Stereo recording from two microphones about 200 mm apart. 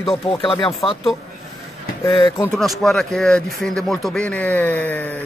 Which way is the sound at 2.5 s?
Centre (ahead or behind).